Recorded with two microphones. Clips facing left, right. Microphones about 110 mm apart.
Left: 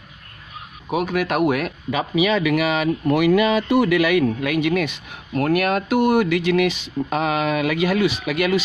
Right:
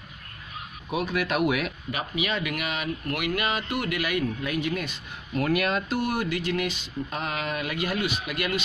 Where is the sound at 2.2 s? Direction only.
90° left.